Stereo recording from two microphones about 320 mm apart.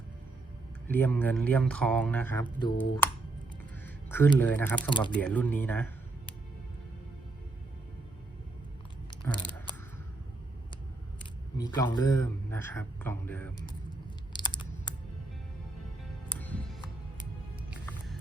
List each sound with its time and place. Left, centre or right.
0.9 s speech: centre
4.9 s speech: centre
5.1 s speech: centre
9.0 s a sound: centre
11.5 s speech: centre
14.4 s a sound: centre
16.4 s music: centre